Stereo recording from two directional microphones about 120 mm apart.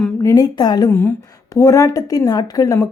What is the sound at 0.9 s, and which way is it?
A woman's voice, 20° left (ahead or behind).